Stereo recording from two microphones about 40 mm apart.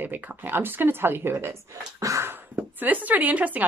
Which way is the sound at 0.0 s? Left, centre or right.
Right.